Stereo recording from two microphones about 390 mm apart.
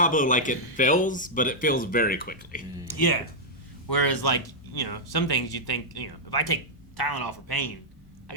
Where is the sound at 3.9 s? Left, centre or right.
Left.